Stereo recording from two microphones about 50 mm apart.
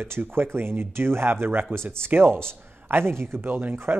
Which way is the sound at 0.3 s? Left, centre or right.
Right.